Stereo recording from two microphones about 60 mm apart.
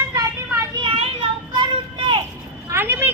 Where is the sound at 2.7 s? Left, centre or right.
Right.